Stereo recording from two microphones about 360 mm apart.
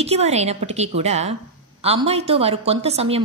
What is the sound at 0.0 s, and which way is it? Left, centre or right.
A woman's voice, centre.